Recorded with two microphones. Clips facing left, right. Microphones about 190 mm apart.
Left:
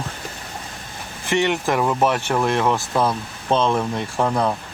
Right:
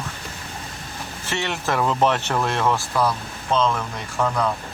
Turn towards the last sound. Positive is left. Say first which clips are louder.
# left 2 dB
turn(degrees=30)  # may be behind; listen again after turning